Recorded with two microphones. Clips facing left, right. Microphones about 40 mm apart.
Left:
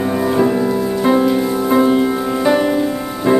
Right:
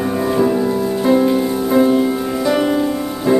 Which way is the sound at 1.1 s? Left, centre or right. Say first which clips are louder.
Even; centre.